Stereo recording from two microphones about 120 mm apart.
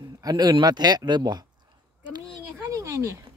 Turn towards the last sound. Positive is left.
turn(degrees=-25)  # may be behind; listen again after turning